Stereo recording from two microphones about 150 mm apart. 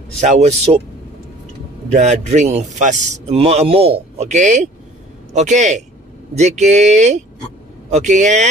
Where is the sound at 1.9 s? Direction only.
50° right (ahead or behind).